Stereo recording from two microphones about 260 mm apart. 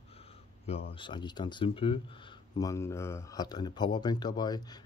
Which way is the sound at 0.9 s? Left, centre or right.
Centre.